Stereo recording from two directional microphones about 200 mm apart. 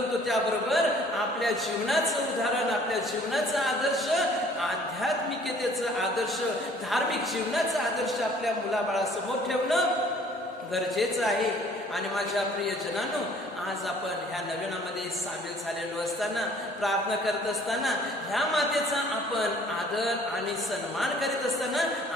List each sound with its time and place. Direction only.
0.3 s a man's voice: centre (ahead or behind)
5.8 s speech: centre (ahead or behind)
16.8 s speech: centre (ahead or behind)
21.0 s speech: centre (ahead or behind)